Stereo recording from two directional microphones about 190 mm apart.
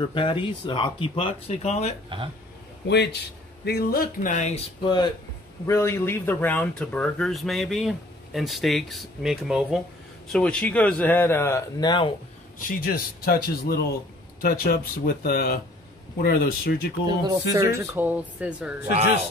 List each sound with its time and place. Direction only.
0.1 s speech: 25° left (ahead or behind)
2.0 s speech: 25° right (ahead or behind)
2.9 s a man's voice: 60° left (ahead or behind); by 4.6 s 40° left (ahead or behind)
4.8 s a man's voice: 25° left (ahead or behind)
12.5 s speech: 50° left (ahead or behind)
17.2 s speech: 20° right (ahead or behind)